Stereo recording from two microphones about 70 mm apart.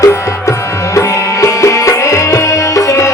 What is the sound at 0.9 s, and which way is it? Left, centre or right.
Music, left.